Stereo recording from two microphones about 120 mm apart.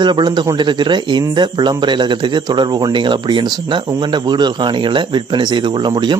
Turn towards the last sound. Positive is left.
turn(degrees=-40)  # may be behind; listen again after turning